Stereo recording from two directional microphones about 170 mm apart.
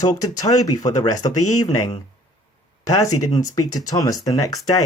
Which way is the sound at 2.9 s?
25° left (ahead or behind).